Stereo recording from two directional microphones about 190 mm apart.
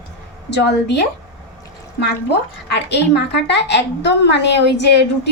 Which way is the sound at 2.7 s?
65° left (ahead or behind).